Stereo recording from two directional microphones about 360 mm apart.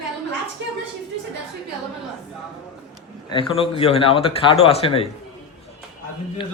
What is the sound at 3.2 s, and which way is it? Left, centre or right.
Speech, centre.